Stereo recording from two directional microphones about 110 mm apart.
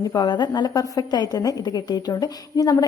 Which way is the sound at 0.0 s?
35° left (ahead or behind).